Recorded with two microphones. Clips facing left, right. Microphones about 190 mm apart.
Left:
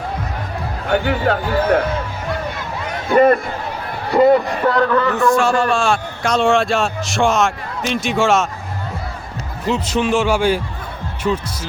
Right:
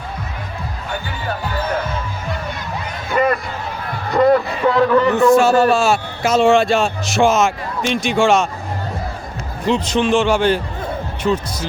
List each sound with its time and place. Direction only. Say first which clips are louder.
0.9 s music: left 10 dB; 65° left (ahead or behind)
3.1 s speech: left 5 dB; 50° left (ahead or behind)
4.1 s a man's voice: left 1 dB; 5° left (ahead or behind)
4.6 s a man's voice: right 2 dB; 5° right (ahead or behind)
9.6 s a man's voice: right 2 dB; 5° left (ahead or behind)